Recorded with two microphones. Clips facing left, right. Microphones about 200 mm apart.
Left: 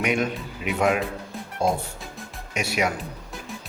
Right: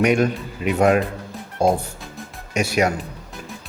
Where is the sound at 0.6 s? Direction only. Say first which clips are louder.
Right 6 dB; 40° right (ahead or behind).